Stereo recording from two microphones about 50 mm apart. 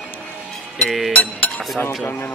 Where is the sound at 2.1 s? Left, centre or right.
Left.